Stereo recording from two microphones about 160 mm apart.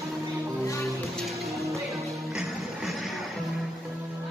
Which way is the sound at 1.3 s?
Centre (ahead or behind).